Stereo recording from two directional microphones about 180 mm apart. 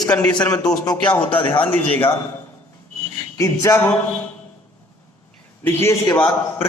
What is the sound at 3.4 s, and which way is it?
Speech, 15° left (ahead or behind).